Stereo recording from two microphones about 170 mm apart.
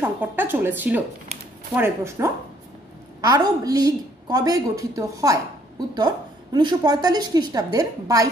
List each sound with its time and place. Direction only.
0.0 s a woman's voice: 10° right (ahead or behind)